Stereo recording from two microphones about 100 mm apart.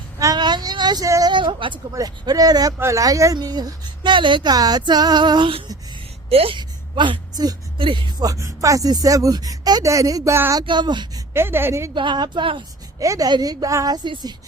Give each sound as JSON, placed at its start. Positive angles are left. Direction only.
{"t": 0.3, "sound": "a sound", "side_deg": -45}
{"t": 1.0, "sound": "speech", "side_deg": -35}
{"t": 1.3, "sound": "a woman's voice", "side_deg": -55}
{"t": 1.9, "sound": "speech", "side_deg": -40}
{"t": 6.3, "sound": "speech", "side_deg": -70}
{"t": 6.6, "sound": "a sound", "side_deg": -55}
{"t": 7.8, "sound": "speech", "side_deg": -55}
{"t": 11.3, "sound": "a woman's voice", "side_deg": -25}
{"t": 11.9, "sound": "speech", "side_deg": -50}
{"t": 13.0, "sound": "speech", "side_deg": -35}